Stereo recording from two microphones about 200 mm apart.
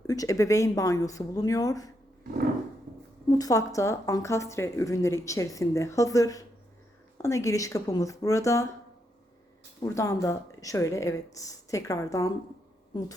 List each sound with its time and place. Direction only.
0.1 s speech: 15° left (ahead or behind)
3.2 s speech: 20° left (ahead or behind)
9.8 s speech: 15° left (ahead or behind)